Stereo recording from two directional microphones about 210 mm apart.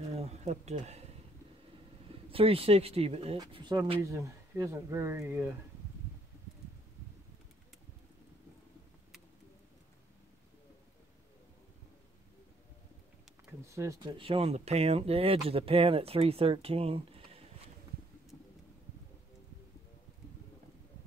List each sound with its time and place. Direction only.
0.1 s a sound: 30° right (ahead or behind)
2.3 s speech: 25° right (ahead or behind); by 5.5 s 10° right (ahead or behind)
13.7 s speech: 15° right (ahead or behind)